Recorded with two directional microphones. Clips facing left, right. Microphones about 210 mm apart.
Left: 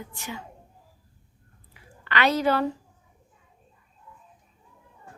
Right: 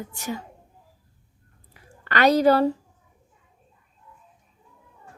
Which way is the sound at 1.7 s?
45° right (ahead or behind).